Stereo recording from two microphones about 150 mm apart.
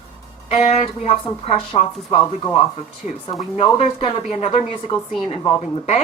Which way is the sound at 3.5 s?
40° left (ahead or behind).